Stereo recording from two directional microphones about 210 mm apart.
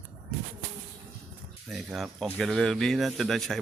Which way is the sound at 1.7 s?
Centre (ahead or behind).